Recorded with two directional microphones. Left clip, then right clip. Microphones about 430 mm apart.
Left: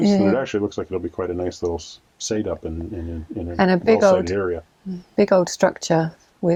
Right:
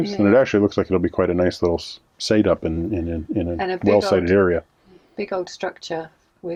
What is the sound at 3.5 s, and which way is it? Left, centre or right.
Speech, left.